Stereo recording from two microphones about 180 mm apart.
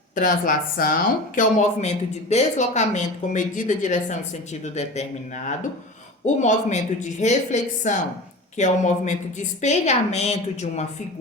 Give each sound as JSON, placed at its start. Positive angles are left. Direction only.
{"t": 0.2, "sound": "a woman's voice", "side_deg": 50}
{"t": 6.2, "sound": "a woman's voice", "side_deg": 40}